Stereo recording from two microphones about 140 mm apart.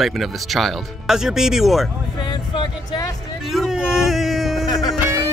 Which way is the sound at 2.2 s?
35° left (ahead or behind).